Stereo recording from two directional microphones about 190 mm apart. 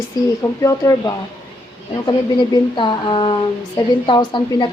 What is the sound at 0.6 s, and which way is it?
A woman's voice, 20° left (ahead or behind).